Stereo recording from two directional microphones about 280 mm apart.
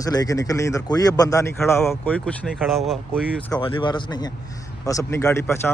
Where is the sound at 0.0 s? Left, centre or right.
Centre.